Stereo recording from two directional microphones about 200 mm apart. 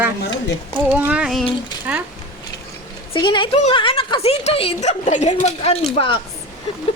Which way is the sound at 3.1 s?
25° left (ahead or behind).